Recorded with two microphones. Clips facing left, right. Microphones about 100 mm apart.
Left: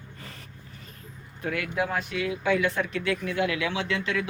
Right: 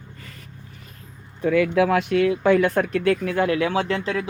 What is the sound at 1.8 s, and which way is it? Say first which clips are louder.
Speech: right 10 dB; 75° right (ahead or behind).